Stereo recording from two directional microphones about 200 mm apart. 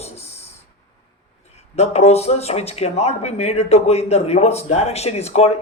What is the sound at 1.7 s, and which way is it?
Speech, 30° left (ahead or behind).